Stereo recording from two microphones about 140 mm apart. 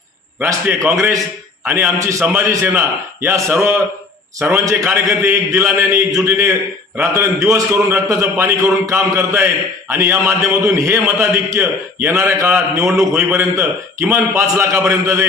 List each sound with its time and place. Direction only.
0.3 s a man's voice: 10° right (ahead or behind)